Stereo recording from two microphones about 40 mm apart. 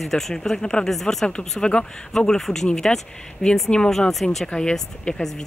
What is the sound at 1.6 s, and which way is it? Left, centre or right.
Speech, left.